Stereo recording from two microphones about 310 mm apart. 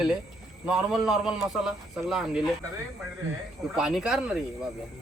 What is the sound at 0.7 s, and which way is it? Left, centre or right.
A man's voice, centre.